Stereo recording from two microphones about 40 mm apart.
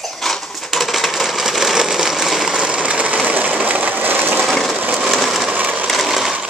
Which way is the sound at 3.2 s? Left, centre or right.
Right.